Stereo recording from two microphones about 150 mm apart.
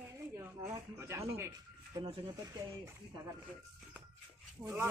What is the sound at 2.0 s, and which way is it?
Speech, 30° right (ahead or behind).